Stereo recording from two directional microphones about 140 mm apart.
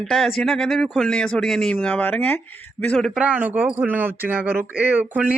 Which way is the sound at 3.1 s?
10° right (ahead or behind).